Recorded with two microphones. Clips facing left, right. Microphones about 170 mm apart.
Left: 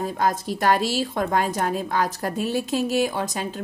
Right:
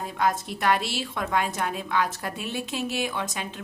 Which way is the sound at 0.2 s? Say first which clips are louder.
Left 1 dB; 40° left (ahead or behind).